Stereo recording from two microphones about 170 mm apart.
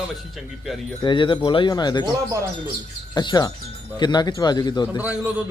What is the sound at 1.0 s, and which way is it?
Speech, 30° left (ahead or behind).